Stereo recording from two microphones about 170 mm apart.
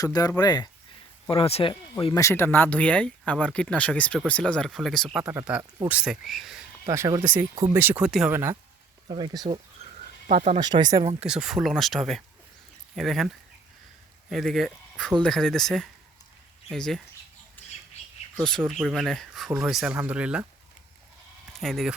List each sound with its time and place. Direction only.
0.0 s speech: 20° left (ahead or behind)
1.3 s speech: 35° left (ahead or behind)
2.1 s speech: 15° left (ahead or behind); by 5.3 s centre (ahead or behind)
5.3 s speech: 10° right (ahead or behind)
6.8 s speech: 15° right (ahead or behind)
9.0 s speech: 25° right (ahead or behind)
10.2 s speech: 45° right (ahead or behind)
10.6 s speech: 25° right (ahead or behind)
11.2 s speech: 5° right (ahead or behind)
18.3 s speech: 5° left (ahead or behind)
21.6 s speech: centre (ahead or behind)